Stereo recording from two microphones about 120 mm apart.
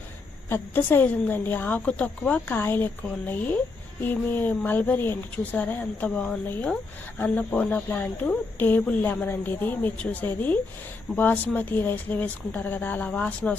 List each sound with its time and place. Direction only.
0.5 s speech: 15° left (ahead or behind)